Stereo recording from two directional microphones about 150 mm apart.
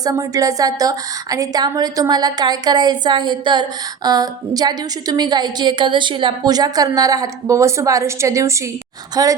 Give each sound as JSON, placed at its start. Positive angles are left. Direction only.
{"t": 0.0, "sound": "a woman's voice", "side_deg": -20}